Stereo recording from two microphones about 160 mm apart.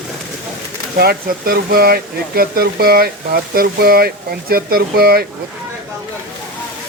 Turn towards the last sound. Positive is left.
turn(degrees=-75)  # may be behind; listen again after turning